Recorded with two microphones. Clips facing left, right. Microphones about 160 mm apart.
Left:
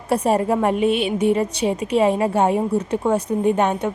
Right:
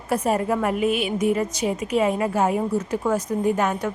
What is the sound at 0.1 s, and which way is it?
A woman's voice, 30° left (ahead or behind).